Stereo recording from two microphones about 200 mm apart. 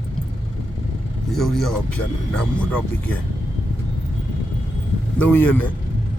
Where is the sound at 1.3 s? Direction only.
Centre (ahead or behind).